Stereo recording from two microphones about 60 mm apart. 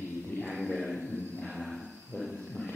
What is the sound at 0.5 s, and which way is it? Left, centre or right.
Speech, centre.